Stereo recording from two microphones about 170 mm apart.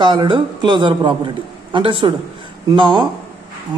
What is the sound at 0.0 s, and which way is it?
A man's voice, 25° right (ahead or behind).